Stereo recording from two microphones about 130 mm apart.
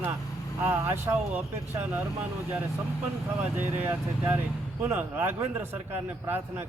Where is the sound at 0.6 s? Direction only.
20° right (ahead or behind).